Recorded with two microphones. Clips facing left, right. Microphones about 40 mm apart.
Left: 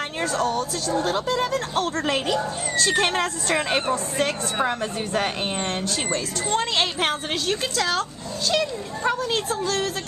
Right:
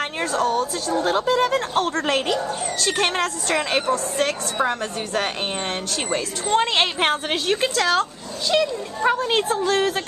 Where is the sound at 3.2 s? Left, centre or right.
Centre.